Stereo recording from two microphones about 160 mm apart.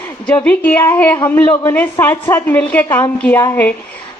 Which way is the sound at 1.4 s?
25° left (ahead or behind).